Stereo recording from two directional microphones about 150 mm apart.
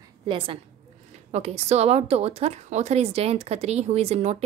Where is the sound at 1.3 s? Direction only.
45° right (ahead or behind).